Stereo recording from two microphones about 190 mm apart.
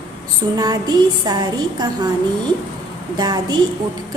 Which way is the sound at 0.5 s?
20° right (ahead or behind).